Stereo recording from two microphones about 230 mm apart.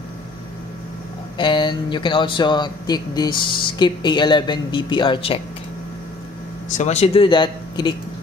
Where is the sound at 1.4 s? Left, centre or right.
Centre.